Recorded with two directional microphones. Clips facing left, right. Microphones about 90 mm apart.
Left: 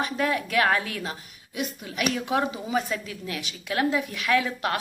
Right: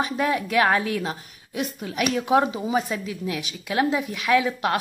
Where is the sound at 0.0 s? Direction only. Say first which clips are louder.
Right 2 dB; 20° right (ahead or behind).